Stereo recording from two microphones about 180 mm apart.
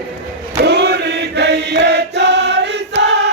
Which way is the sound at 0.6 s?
65° right (ahead or behind).